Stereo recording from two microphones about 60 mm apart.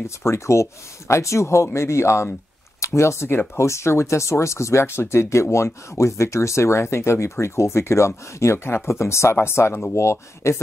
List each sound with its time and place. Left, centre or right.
0.0 s speech: left